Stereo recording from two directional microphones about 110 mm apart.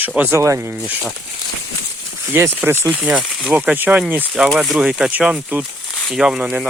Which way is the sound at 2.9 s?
5° right (ahead or behind).